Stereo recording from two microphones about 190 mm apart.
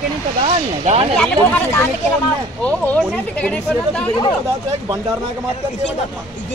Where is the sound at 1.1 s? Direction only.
5° left (ahead or behind).